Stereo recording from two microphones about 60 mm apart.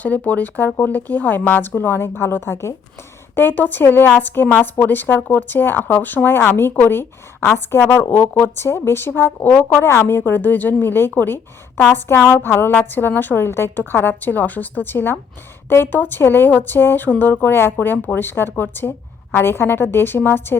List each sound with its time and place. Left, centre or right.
0.0 s speech: left
3.3 s speech: left
9.8 s speech: left